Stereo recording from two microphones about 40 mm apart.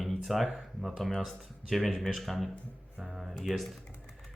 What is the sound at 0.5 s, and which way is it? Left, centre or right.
Speech, centre.